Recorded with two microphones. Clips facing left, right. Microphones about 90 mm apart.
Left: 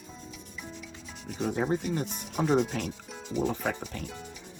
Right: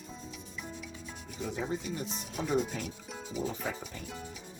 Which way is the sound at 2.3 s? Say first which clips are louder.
Left 6 dB; 70° left (ahead or behind).